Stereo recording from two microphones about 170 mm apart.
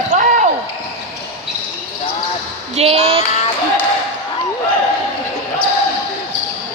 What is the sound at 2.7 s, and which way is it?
Speech, 35° right (ahead or behind).